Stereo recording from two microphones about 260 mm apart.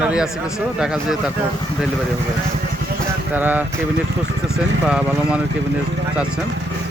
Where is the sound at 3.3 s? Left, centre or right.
Centre.